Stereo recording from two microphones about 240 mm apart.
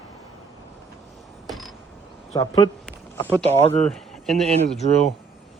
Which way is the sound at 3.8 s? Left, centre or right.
Centre.